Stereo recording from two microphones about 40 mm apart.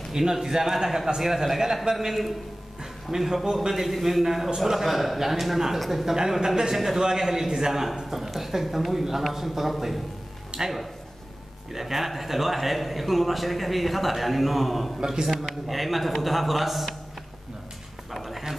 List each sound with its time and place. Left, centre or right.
0.1 s speech: centre
2.8 s music: centre
3.5 s a man's voice: centre
10.5 s a sound: right
11.7 s a man's voice: centre
18.1 s a sound: centre